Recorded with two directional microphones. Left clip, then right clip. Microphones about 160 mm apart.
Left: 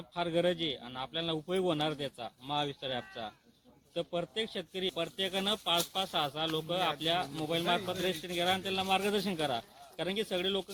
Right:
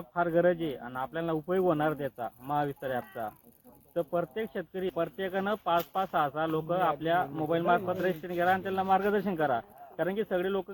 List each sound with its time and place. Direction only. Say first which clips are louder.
0.1 s speech: right 5 dB; 25° left (ahead or behind)